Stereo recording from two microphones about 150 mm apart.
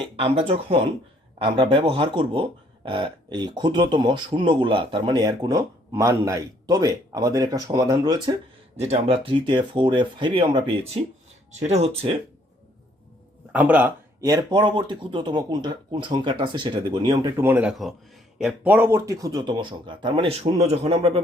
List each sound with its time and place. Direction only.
0.2 s speech: 40° right (ahead or behind)
8.7 s speech: 45° right (ahead or behind)
11.6 s speech: 45° right (ahead or behind)
13.5 s speech: 10° right (ahead or behind)
14.2 s speech: 25° right (ahead or behind)
17.3 s speech: 15° right (ahead or behind); by 21.2 s 40° right (ahead or behind)